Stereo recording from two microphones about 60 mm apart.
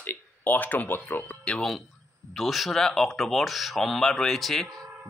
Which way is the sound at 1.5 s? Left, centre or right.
Centre.